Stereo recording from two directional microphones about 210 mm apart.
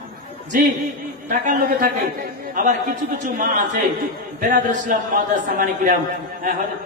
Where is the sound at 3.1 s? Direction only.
35° right (ahead or behind).